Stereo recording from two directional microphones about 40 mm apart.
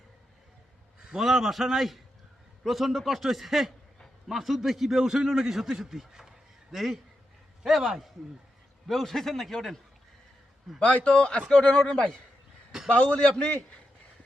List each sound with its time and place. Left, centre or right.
1.2 s a man's voice: centre
6.7 s a man's voice: centre
8.9 s a man's voice: centre
10.8 s speech: left
12.9 s a man's voice: left